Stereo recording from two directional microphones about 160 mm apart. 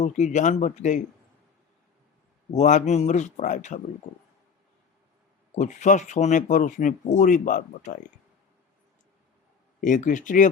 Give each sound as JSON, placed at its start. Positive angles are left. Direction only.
{"t": 0.0, "sound": "speech", "side_deg": 50}
{"t": 2.5, "sound": "speech", "side_deg": 50}
{"t": 5.5, "sound": "speech", "side_deg": 50}
{"t": 9.8, "sound": "speech", "side_deg": 55}